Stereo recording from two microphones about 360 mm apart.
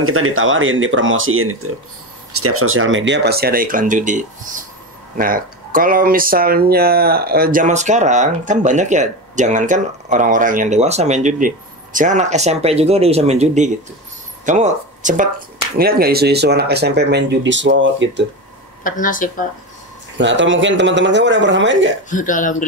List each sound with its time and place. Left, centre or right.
0.0 s speech: right
18.9 s speech: left
20.2 s speech: right
22.1 s speech: left